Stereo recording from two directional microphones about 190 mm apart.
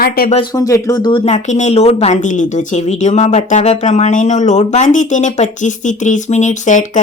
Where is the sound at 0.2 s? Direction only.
55° left (ahead or behind).